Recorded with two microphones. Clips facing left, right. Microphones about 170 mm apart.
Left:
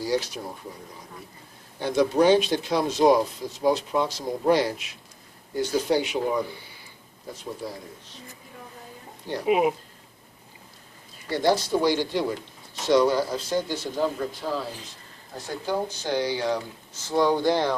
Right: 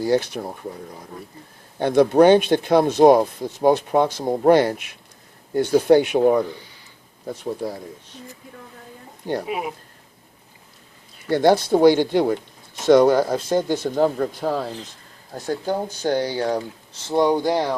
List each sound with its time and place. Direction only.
0.0 s speech: 55° right (ahead or behind)
1.8 s speech: 60° right (ahead or behind)
7.6 s speech: 50° right (ahead or behind)
9.5 s speech: 20° left (ahead or behind)
11.3 s speech: 55° right (ahead or behind)
15.6 s speech: 50° right (ahead or behind)
17.1 s speech: 20° right (ahead or behind)